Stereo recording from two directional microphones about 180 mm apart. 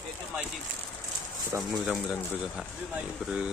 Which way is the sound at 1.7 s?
Centre (ahead or behind).